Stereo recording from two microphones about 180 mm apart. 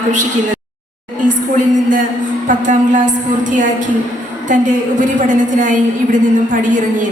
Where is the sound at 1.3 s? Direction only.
45° right (ahead or behind).